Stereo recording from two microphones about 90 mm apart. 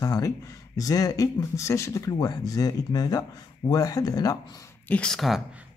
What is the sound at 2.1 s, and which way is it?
Speech, 50° left (ahead or behind).